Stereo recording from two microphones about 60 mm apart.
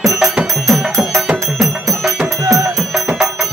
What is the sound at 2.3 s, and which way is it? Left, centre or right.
Music, right.